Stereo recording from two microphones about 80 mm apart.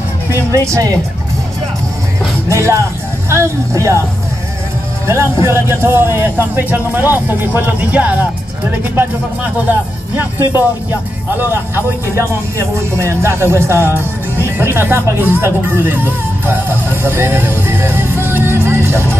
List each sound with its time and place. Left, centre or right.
0.5 s speech: right
2.5 s speech: right
5.0 s speech: right
11.5 s speech: right